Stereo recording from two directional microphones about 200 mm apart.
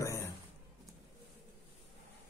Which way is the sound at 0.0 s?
15° left (ahead or behind).